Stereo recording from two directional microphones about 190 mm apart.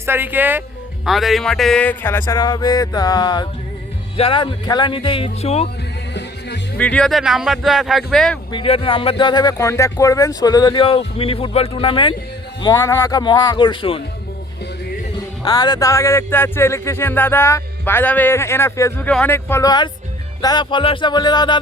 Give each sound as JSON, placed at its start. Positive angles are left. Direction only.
{"t": 0.0, "sound": "speech", "side_deg": -10}
{"t": 2.2, "sound": "speech", "side_deg": 20}
{"t": 6.7, "sound": "speech", "side_deg": 5}
{"t": 8.5, "sound": "speech", "side_deg": 30}
{"t": 15.4, "sound": "speech", "side_deg": 20}